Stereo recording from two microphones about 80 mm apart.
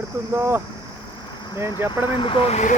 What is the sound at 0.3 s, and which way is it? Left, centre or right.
Speech, right.